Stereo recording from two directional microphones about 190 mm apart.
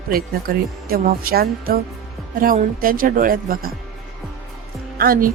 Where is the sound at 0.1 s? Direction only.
50° right (ahead or behind).